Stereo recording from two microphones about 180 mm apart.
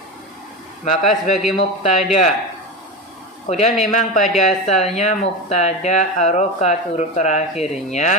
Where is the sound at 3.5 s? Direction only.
35° left (ahead or behind).